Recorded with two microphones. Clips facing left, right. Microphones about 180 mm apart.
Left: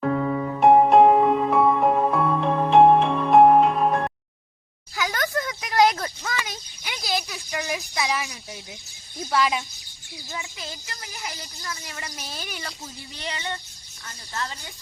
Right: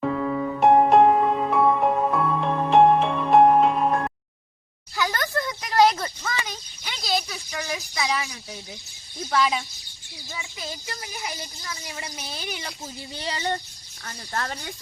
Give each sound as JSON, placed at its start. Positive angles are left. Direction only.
{"t": 0.0, "sound": "music", "side_deg": 0}
{"t": 4.9, "sound": "a sound", "side_deg": 0}
{"t": 9.3, "sound": "speech", "side_deg": 5}
{"t": 11.9, "sound": "speech", "side_deg": -5}
{"t": 13.1, "sound": "child singing", "side_deg": -35}
{"t": 14.0, "sound": "speech", "side_deg": -55}